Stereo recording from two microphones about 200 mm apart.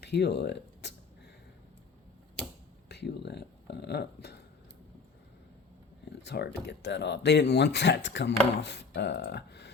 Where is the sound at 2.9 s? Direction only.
55° left (ahead or behind).